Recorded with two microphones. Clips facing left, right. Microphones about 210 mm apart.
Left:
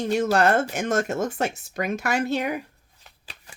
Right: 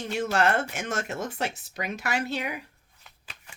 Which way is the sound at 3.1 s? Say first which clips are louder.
Left 2 dB; 35° left (ahead or behind).